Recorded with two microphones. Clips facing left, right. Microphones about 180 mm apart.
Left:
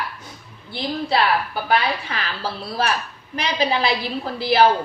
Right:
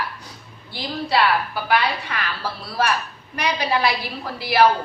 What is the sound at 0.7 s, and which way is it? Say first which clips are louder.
A woman's voice: left 1 dB; 25° left (ahead or behind).